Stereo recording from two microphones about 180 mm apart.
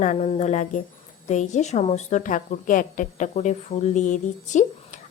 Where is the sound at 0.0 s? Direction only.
40° left (ahead or behind).